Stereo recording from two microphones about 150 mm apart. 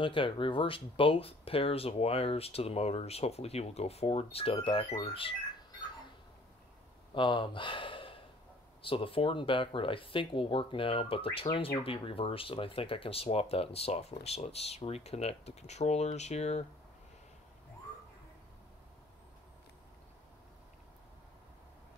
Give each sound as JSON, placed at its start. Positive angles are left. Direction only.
{"t": 0.0, "sound": "speech", "side_deg": 35}
{"t": 7.2, "sound": "speech", "side_deg": 35}